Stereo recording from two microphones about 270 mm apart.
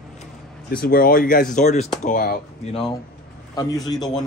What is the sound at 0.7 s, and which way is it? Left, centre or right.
Speech, left.